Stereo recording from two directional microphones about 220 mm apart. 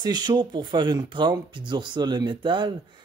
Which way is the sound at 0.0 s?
20° right (ahead or behind).